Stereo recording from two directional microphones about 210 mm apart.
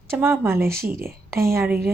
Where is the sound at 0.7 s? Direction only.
45° right (ahead or behind).